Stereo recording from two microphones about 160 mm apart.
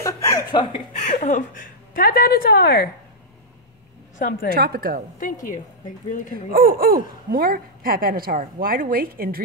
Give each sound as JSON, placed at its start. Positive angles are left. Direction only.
{"t": 0.0, "sound": "chuckle", "side_deg": 20}
{"t": 1.1, "sound": "a woman's voice", "side_deg": 50}
{"t": 4.2, "sound": "a woman's voice", "side_deg": 65}
{"t": 4.6, "sound": "a woman's voice", "side_deg": -75}
{"t": 5.2, "sound": "a woman's voice", "side_deg": 55}
{"t": 6.5, "sound": "speech", "side_deg": -65}